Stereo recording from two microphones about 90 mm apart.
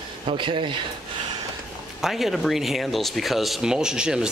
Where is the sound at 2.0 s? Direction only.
5° right (ahead or behind).